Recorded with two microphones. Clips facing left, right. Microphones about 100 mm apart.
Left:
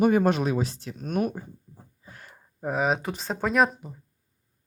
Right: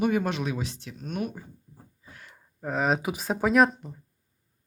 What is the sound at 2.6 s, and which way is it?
Speech, 5° left (ahead or behind).